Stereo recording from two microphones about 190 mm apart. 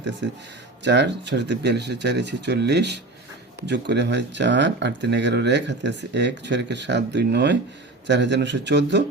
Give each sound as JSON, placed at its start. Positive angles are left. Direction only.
{"t": 0.9, "sound": "a man's voice", "side_deg": -65}